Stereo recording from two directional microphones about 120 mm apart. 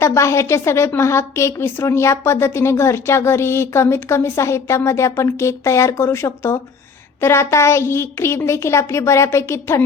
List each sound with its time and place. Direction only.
0.0 s a woman's voice: 25° left (ahead or behind)